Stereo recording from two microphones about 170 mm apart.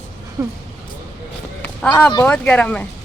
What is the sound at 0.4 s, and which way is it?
Speech, 15° right (ahead or behind).